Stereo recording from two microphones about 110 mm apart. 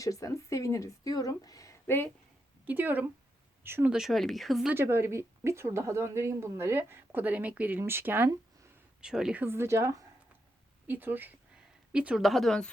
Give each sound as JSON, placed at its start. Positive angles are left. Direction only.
{"t": 0.0, "sound": "a woman's voice", "side_deg": 30}
{"t": 2.6, "sound": "speech", "side_deg": -15}
{"t": 3.9, "sound": "speech", "side_deg": 0}
{"t": 4.7, "sound": "a woman's voice", "side_deg": -25}
{"t": 9.0, "sound": "speech", "side_deg": -5}
{"t": 9.4, "sound": "a woman's voice", "side_deg": -20}
{"t": 10.8, "sound": "speech", "side_deg": -15}